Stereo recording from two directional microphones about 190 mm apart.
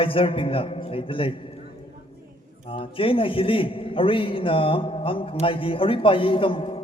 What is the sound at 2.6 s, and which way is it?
A man's voice, 30° left (ahead or behind).